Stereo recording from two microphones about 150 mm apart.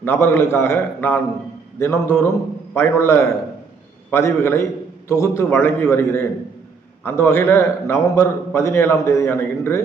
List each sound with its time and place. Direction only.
0.0 s a man's voice: 15° left (ahead or behind)